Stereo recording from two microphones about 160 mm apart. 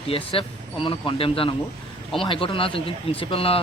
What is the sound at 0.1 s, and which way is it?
Speech, 35° left (ahead or behind).